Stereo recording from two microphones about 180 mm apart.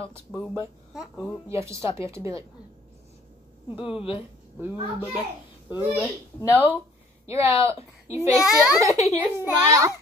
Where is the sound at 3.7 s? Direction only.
5° right (ahead or behind).